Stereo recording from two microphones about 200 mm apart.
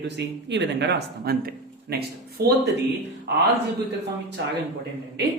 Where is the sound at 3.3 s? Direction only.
60° right (ahead or behind).